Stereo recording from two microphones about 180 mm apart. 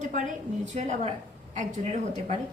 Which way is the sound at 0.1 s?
45° right (ahead or behind).